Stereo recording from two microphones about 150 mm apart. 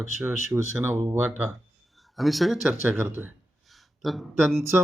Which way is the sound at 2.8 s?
15° right (ahead or behind).